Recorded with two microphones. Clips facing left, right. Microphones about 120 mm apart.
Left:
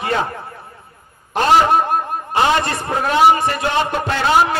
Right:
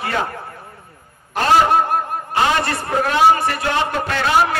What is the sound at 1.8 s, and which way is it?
A man's voice, 20° left (ahead or behind).